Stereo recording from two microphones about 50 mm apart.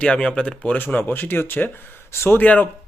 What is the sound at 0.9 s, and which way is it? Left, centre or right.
Speech, left.